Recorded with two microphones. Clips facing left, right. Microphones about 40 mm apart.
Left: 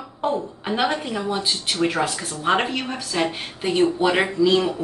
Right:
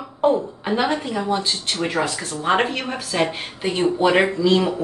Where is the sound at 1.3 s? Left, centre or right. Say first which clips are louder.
Right 1 dB; centre.